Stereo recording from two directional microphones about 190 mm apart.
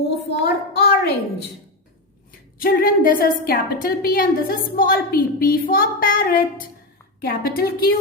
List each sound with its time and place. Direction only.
0.3 s child singing: 60° left (ahead or behind)
2.6 s a woman's voice: 50° left (ahead or behind)